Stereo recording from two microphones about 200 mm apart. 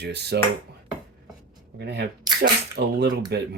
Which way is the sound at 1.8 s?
55° right (ahead or behind).